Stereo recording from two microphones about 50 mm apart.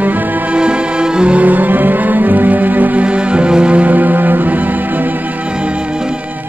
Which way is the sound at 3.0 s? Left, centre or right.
Right.